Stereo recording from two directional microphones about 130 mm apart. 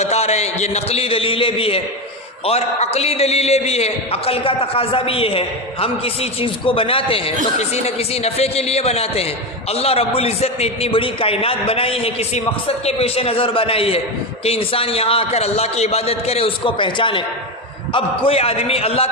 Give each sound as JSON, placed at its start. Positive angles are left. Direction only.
{"t": 0.0, "sound": "a man's voice", "side_deg": 55}